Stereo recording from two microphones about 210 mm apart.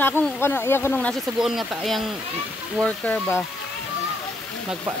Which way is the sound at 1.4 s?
Centre (ahead or behind).